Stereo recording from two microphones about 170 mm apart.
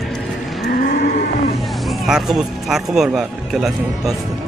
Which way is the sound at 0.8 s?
55° left (ahead or behind).